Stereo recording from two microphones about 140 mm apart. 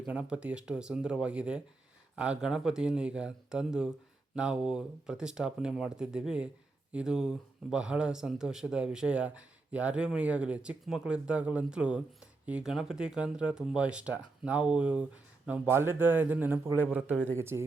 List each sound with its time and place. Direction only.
0.0 s speech: 10° right (ahead or behind)